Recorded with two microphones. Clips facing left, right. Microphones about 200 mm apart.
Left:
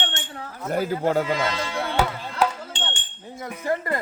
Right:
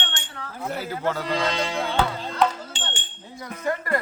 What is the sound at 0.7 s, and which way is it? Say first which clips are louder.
Speech: left 6 dB; 50° left (ahead or behind).